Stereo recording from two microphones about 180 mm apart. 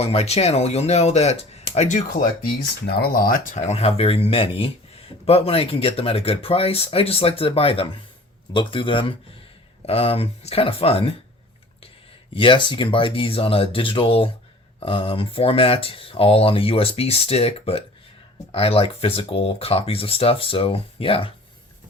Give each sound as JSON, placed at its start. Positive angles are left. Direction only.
{"t": 0.0, "sound": "speech", "side_deg": 35}
{"t": 3.0, "sound": "speech", "side_deg": 55}
{"t": 12.3, "sound": "speech", "side_deg": 30}